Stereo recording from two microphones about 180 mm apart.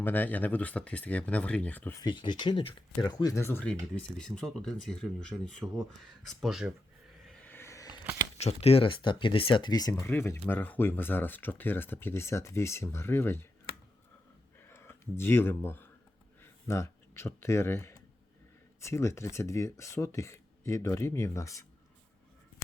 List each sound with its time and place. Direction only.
0.0 s speech: 10° left (ahead or behind)
2.0 s speech: 25° left (ahead or behind); by 6.7 s centre (ahead or behind)
7.3 s a sound: 10° left (ahead or behind)
8.4 s speech: 35° left (ahead or behind); by 13.4 s 15° left (ahead or behind)
14.7 s speech: 15° left (ahead or behind)